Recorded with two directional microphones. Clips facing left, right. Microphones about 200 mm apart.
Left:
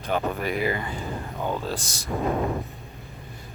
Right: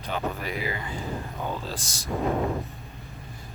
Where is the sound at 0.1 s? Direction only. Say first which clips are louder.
Left 4 dB; 50° left (ahead or behind).